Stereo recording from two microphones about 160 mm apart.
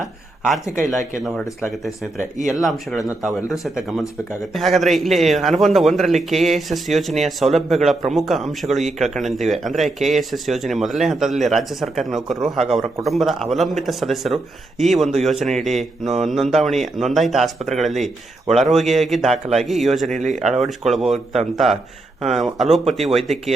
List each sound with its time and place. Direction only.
2.5 s a man's voice: centre (ahead or behind)
20.1 s speech: 50° right (ahead or behind)
20.6 s a man's voice: centre (ahead or behind)